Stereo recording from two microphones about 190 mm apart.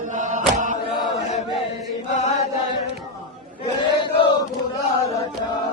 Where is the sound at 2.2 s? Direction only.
35° left (ahead or behind).